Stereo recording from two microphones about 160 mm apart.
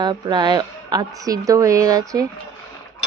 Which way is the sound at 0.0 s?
25° right (ahead or behind).